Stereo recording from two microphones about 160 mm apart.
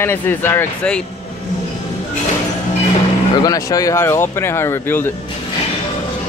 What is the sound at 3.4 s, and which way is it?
Speech, 20° left (ahead or behind).